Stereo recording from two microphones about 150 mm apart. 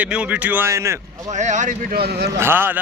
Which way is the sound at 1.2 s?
50° right (ahead or behind).